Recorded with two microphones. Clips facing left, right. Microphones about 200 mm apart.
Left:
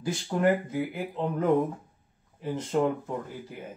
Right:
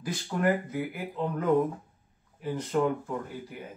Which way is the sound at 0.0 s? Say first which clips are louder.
Left 3 dB; 25° left (ahead or behind).